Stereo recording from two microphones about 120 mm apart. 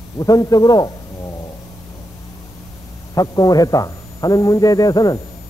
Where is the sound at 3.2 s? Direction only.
30° left (ahead or behind).